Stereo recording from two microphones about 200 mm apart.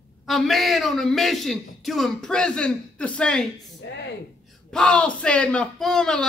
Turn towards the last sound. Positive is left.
turn(degrees=5)  # may be behind; listen again after turning